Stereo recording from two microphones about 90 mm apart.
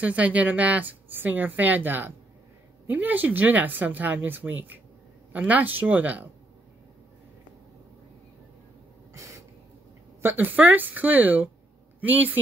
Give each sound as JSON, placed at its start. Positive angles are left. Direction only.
{"t": 0.0, "sound": "a woman's voice", "side_deg": -15}
{"t": 9.1, "sound": "a sound", "side_deg": -35}
{"t": 10.2, "sound": "a woman's voice", "side_deg": -20}